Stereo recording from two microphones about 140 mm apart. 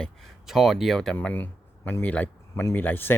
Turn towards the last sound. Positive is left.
turn(degrees=15)  # may be behind; listen again after turning